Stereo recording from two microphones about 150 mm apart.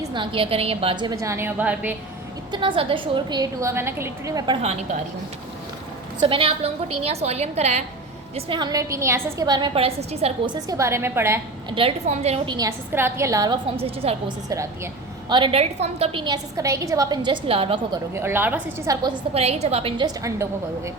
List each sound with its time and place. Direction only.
0.0 s a woman's voice: 30° right (ahead or behind); by 2.0 s 10° right (ahead or behind)
2.5 s a woman's voice: 35° right (ahead or behind)
6.2 s a woman's voice: 35° right (ahead or behind)
8.4 s a woman's voice: 35° right (ahead or behind)
10.5 s a woman's voice: 20° right (ahead or behind)
11.7 s a woman's voice: 40° right (ahead or behind)
12.5 s a woman's voice: 25° right (ahead or behind)
12.9 s a woman's voice: 15° right (ahead or behind)
13.7 s a woman's voice: 40° right (ahead or behind)
18.1 s a woman's voice: 15° right (ahead or behind)
18.9 s a woman's voice: 30° right (ahead or behind)
19.3 s a woman's voice: 45° right (ahead or behind)
20.1 s a woman's voice: 20° right (ahead or behind)